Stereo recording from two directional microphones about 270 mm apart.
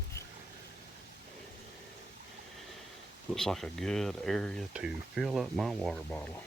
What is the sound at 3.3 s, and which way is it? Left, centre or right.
Speech, centre.